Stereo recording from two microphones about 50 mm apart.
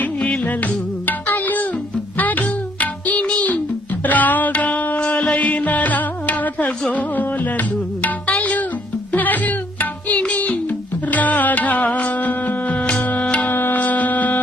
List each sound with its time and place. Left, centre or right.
0.0 s music: left
13.5 s wind instrument: left